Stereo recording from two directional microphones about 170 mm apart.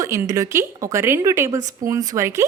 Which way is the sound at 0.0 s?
20° right (ahead or behind).